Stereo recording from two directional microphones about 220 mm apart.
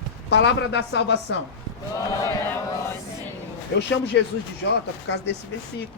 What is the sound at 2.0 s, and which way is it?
Speech, 15° left (ahead or behind).